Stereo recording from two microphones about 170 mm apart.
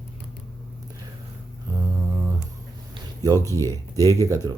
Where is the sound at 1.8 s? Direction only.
20° right (ahead or behind).